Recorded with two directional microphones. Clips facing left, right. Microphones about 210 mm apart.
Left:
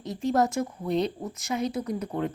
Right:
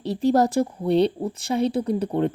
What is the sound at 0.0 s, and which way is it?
Speech, 35° right (ahead or behind).